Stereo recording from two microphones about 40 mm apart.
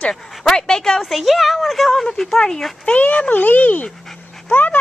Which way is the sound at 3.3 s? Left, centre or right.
Left.